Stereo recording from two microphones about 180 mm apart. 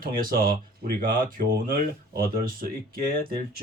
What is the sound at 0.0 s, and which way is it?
Speech, 55° right (ahead or behind).